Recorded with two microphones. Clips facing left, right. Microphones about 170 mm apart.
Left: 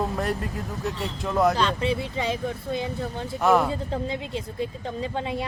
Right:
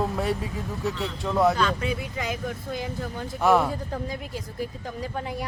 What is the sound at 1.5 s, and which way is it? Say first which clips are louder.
Speech: left 2 dB; 30° left (ahead or behind).